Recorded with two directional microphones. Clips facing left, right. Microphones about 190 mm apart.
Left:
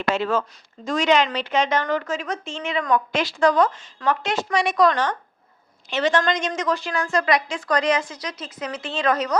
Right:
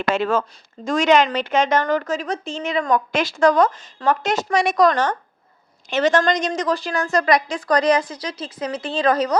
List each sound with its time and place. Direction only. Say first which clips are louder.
0.1 s a woman's voice: right 2 dB; 50° right (ahead or behind); by 9.4 s 30° right (ahead or behind)